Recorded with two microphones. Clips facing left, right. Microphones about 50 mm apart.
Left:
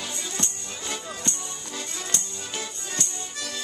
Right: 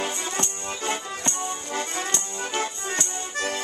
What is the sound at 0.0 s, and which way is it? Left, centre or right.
Music, right.